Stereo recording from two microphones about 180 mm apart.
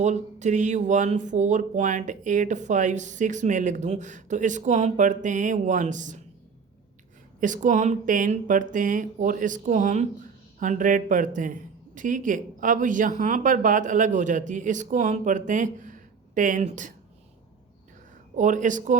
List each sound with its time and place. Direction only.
0.0 s a man's voice: 40° right (ahead or behind)
7.3 s a man's voice: 45° right (ahead or behind)
18.3 s a man's voice: 45° right (ahead or behind)